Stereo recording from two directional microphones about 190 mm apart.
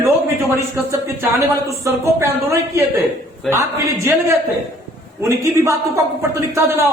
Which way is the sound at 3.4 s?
Centre (ahead or behind).